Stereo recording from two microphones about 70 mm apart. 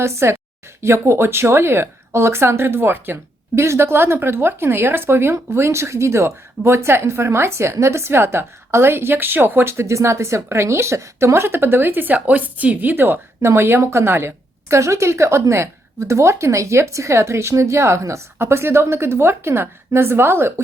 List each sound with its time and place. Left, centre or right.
0.0 s a woman's voice: right
13.4 s a woman's voice: right